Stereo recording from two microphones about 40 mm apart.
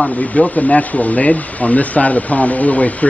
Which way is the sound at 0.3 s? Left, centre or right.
Left.